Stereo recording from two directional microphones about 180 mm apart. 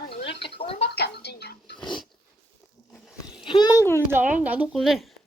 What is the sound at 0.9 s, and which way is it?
Dishes, 65° left (ahead or behind).